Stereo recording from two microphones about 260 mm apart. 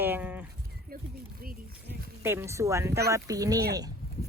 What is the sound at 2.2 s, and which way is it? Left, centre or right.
Speech, centre.